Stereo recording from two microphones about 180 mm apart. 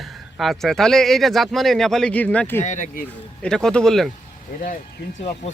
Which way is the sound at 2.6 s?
45° left (ahead or behind).